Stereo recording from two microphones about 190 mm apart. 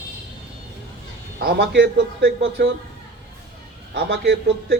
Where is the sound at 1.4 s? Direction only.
55° right (ahead or behind).